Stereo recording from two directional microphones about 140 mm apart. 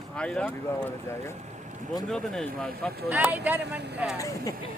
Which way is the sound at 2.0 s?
5° left (ahead or behind).